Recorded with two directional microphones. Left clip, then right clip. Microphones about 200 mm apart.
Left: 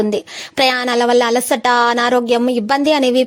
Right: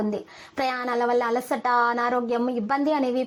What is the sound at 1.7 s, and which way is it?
Speech, 35° left (ahead or behind).